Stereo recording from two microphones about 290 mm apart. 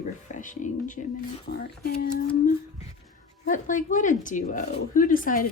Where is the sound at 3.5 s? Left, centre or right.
Left.